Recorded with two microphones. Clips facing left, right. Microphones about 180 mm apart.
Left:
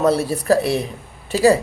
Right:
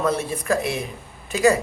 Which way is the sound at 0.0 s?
35° left (ahead or behind).